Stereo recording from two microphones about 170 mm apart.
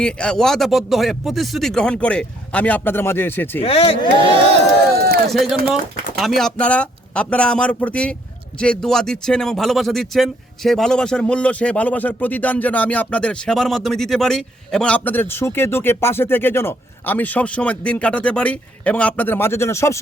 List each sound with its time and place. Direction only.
0.0 s speech: 5° left (ahead or behind)
3.6 s speech: 35° left (ahead or behind)
4.9 s run: 70° right (ahead or behind)
5.3 s speech: centre (ahead or behind); by 20.0 s 15° left (ahead or behind)